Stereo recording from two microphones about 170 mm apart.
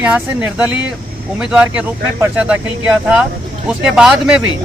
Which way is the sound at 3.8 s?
5° right (ahead or behind).